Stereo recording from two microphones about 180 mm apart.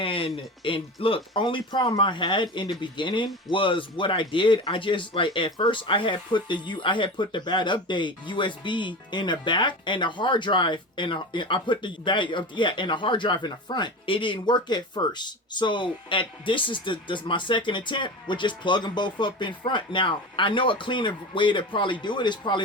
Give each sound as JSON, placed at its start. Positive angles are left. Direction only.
{"t": 0.0, "sound": "speech", "side_deg": 30}